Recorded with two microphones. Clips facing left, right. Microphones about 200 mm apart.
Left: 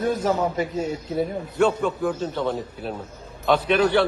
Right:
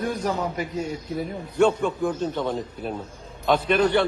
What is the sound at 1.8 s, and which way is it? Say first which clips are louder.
A man's voice: even; 5° left (ahead or behind).